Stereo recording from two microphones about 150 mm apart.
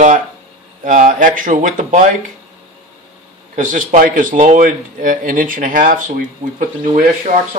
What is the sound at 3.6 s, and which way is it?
Speech, 60° right (ahead or behind).